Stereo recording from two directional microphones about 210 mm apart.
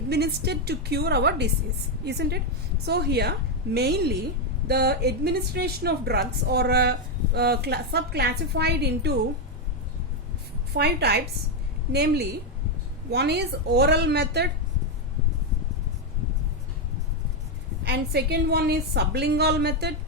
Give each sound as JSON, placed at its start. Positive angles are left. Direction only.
{"t": 0.1, "sound": "a woman's voice", "side_deg": -50}
{"t": 10.8, "sound": "a woman's voice", "side_deg": -50}
{"t": 17.8, "sound": "a woman's voice", "side_deg": -50}